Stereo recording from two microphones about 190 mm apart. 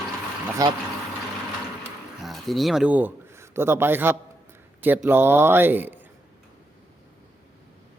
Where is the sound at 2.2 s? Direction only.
Centre (ahead or behind).